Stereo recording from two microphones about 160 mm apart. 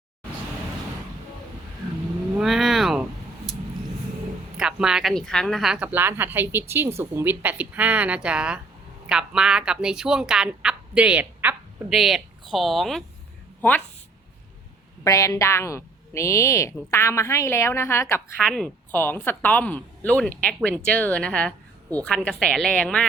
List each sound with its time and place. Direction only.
2.4 s a sound: centre (ahead or behind)
4.5 s a woman's voice: 5° right (ahead or behind)
15.0 s a woman's voice: 20° left (ahead or behind)
18.4 s speech: centre (ahead or behind)
18.9 s a woman's voice: 15° left (ahead or behind)